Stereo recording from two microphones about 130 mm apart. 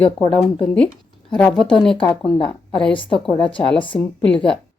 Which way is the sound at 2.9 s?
40° left (ahead or behind).